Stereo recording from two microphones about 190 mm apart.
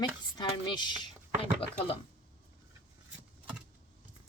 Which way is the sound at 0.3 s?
25° left (ahead or behind).